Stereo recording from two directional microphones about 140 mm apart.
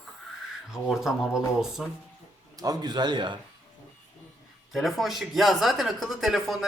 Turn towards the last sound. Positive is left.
turn(degrees=0)  # may be behind; listen again after turning